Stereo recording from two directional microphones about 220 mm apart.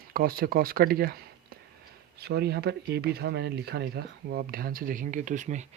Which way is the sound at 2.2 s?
45° right (ahead or behind).